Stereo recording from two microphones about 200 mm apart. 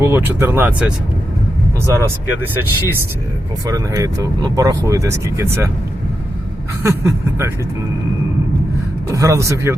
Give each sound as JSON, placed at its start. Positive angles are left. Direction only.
{"t": 0.0, "sound": "speech", "side_deg": -10}
{"t": 3.7, "sound": "speech", "side_deg": -15}
{"t": 6.8, "sound": "speech", "side_deg": -15}
{"t": 9.0, "sound": "speech", "side_deg": -15}